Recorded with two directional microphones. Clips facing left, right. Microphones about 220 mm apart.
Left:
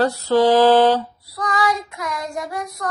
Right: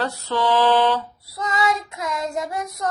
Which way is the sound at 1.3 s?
25° right (ahead or behind).